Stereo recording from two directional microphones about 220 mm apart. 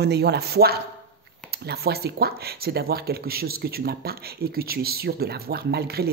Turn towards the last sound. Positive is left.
turn(degrees=-45)  # may be behind; listen again after turning